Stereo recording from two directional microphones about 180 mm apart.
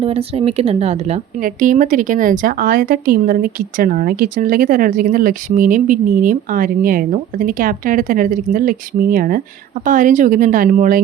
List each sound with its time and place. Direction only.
0.0 s speech: 30° right (ahead or behind)
1.4 s speech: 50° right (ahead or behind)